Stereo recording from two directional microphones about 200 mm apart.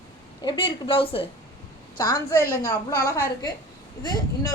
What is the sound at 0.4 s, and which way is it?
Speech, 25° left (ahead or behind).